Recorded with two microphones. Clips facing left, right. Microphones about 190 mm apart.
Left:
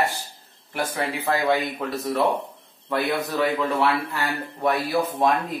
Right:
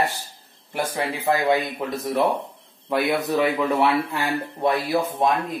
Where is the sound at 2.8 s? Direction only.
15° right (ahead or behind).